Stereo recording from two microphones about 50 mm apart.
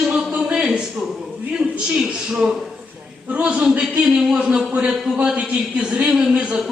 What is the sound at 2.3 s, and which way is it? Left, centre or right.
Speech, centre.